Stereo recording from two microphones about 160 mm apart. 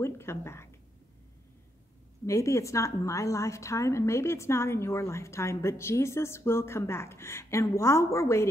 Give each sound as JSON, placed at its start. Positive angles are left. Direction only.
{"t": 0.0, "sound": "a woman's voice", "side_deg": 15}
{"t": 2.2, "sound": "a woman's voice", "side_deg": 20}